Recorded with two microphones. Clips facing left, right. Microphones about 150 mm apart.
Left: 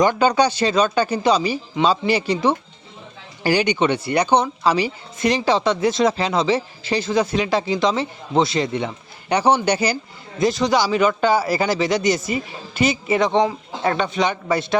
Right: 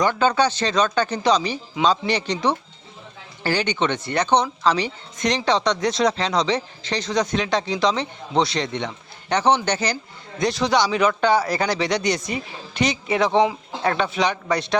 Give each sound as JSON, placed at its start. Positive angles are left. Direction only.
{"t": 0.0, "sound": "speech", "side_deg": 15}